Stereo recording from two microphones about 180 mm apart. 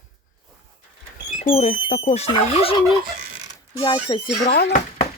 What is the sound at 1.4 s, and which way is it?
Speech, 35° left (ahead or behind).